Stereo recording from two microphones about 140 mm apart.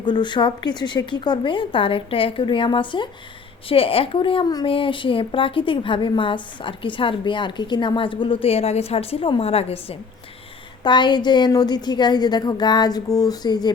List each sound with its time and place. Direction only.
0.0 s a woman's voice: 35° left (ahead or behind)
10.8 s a woman's voice: 35° left (ahead or behind)